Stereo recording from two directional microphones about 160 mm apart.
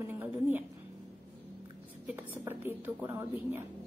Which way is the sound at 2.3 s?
15° right (ahead or behind).